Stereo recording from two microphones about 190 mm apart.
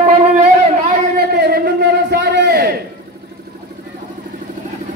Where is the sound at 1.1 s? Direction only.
55° right (ahead or behind).